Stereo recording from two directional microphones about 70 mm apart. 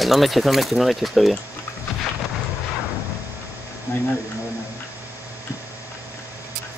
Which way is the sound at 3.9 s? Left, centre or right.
Left.